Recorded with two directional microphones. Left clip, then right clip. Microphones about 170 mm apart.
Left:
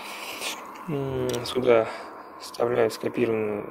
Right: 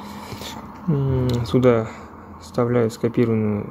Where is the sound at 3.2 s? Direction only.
10° left (ahead or behind).